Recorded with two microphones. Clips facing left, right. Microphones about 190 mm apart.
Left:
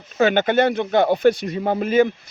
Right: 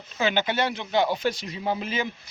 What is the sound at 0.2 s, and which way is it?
Speech, 50° left (ahead or behind).